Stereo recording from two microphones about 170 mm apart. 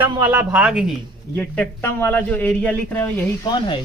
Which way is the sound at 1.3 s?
10° left (ahead or behind).